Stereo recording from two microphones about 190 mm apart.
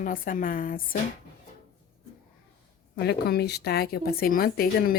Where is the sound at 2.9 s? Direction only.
60° left (ahead or behind).